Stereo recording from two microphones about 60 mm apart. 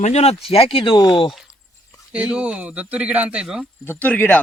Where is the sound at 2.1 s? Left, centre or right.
Centre.